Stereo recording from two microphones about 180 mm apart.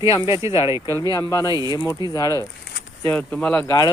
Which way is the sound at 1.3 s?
20° left (ahead or behind).